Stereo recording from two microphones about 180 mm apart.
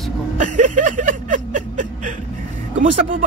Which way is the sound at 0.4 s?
45° right (ahead or behind).